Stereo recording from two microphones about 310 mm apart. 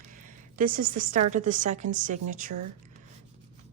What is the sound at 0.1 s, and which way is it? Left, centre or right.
A woman's voice, right.